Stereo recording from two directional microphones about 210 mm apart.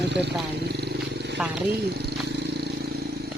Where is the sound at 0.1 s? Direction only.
55° right (ahead or behind).